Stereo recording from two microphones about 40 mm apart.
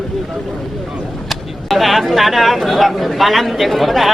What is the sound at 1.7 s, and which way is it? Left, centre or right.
Speech, centre.